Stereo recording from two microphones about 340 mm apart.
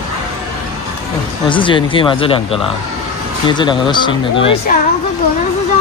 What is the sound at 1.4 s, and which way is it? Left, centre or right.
Speech, centre.